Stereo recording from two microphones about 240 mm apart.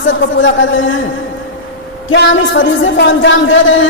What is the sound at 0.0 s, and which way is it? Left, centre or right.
Speech, left.